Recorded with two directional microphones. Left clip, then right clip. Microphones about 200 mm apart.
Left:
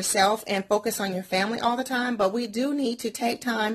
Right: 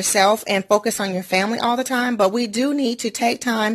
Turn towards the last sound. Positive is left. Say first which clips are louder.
# right 6 dB
turn(degrees=-35)  # may be behind; listen again after turning